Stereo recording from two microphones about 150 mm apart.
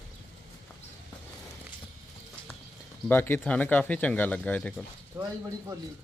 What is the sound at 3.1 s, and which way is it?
Speech, 15° left (ahead or behind).